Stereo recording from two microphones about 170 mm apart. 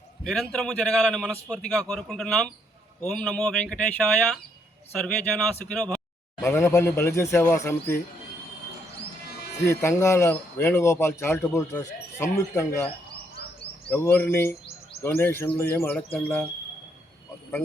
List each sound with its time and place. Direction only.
0.5 s a man's voice: 5° left (ahead or behind)
9.6 s speech: 15° left (ahead or behind)
13.9 s speech: 10° left (ahead or behind)